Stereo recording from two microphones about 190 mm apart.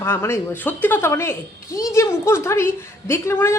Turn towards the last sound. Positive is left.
turn(degrees=15)  # may be behind; listen again after turning